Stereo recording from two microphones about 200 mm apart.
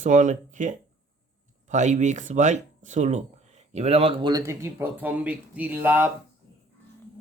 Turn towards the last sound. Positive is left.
turn(degrees=-10)  # may be behind; listen again after turning